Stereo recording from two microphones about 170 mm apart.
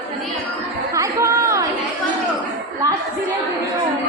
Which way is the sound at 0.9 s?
15° right (ahead or behind).